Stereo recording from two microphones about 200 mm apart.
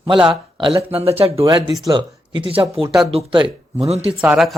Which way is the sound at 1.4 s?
20° right (ahead or behind).